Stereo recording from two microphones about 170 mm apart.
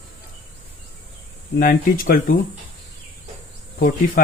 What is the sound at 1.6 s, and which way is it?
Speech, 55° left (ahead or behind).